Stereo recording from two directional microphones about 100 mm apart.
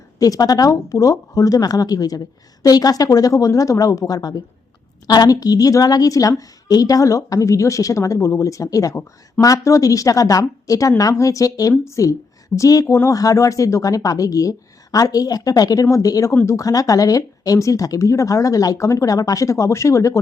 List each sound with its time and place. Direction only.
0.2 s a woman's voice: 40° left (ahead or behind)